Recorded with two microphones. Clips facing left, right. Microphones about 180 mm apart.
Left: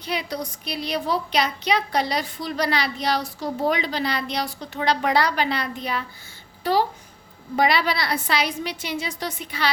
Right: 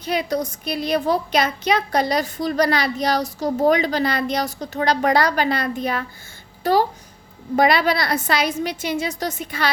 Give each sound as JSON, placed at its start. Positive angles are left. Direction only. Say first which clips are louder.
{"t": 0.0, "sound": "a woman's voice", "louder": "right 6 dB", "side_deg": -45}